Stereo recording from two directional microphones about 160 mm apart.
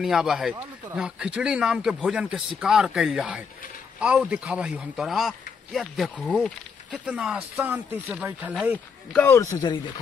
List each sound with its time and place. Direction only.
0.0 s speech: 5° right (ahead or behind)
7.1 s speech: 5° right (ahead or behind)
8.7 s speech: 10° left (ahead or behind)